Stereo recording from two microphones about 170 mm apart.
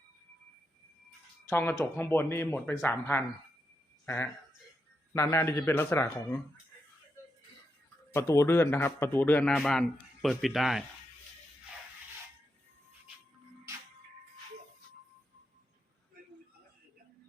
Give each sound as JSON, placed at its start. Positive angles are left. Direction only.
{"t": 1.5, "sound": "speech", "side_deg": 10}
{"t": 8.1, "sound": "speech", "side_deg": 15}